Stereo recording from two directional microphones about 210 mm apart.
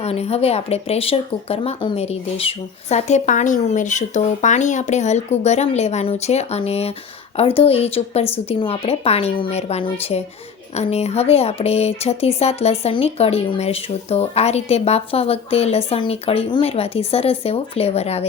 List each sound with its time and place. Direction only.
0.0 s speech: 30° left (ahead or behind)